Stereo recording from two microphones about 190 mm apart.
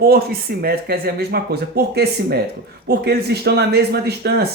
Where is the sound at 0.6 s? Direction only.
55° right (ahead or behind).